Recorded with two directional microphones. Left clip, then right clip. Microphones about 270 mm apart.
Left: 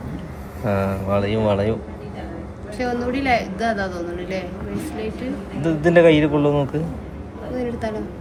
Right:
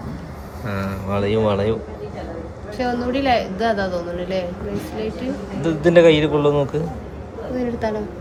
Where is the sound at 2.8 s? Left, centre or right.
Centre.